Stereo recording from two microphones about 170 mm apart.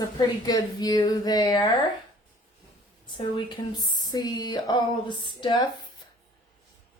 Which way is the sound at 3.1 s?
25° left (ahead or behind).